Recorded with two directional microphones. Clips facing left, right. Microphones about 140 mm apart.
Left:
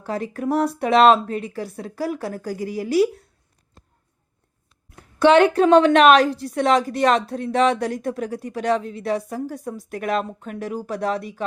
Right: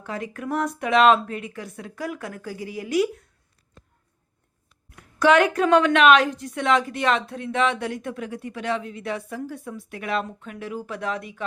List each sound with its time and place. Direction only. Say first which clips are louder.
0.0 s a woman's voice: left 6 dB; 35° left (ahead or behind)
4.9 s a woman's voice: left 4 dB; 30° left (ahead or behind)